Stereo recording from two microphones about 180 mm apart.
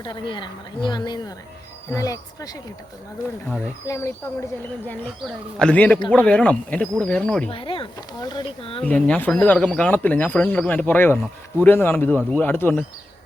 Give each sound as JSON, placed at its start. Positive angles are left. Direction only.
{"t": 0.0, "sound": "speech", "side_deg": 25}
{"t": 3.8, "sound": "speech", "side_deg": 15}
{"t": 5.2, "sound": "speech", "side_deg": 5}
{"t": 7.5, "sound": "speech", "side_deg": 30}
{"t": 8.8, "sound": "speech", "side_deg": 5}